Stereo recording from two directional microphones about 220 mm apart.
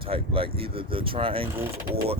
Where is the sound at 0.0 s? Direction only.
25° right (ahead or behind).